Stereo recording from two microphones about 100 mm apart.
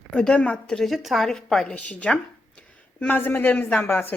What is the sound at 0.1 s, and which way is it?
A woman's voice, 10° left (ahead or behind).